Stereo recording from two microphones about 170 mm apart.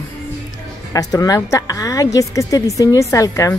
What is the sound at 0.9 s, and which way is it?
A woman's voice, 20° left (ahead or behind).